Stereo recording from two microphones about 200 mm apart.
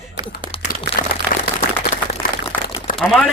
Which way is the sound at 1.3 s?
40° left (ahead or behind).